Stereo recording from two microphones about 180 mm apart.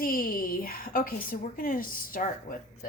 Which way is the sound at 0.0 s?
50° left (ahead or behind).